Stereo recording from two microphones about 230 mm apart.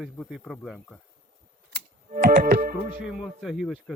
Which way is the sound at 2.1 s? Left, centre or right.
Right.